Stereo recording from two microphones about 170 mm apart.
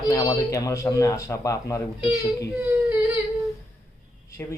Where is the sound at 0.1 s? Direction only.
25° left (ahead or behind).